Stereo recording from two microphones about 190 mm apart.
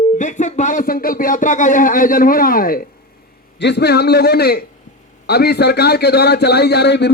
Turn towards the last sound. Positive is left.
turn(degrees=60)  # may be behind; listen again after turning